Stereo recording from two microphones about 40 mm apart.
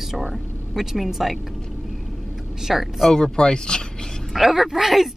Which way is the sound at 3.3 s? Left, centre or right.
Left.